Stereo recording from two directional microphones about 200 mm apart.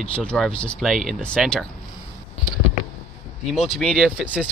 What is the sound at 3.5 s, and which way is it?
Speech, centre (ahead or behind).